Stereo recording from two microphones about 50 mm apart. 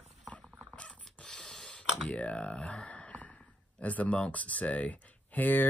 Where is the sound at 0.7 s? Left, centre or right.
Left.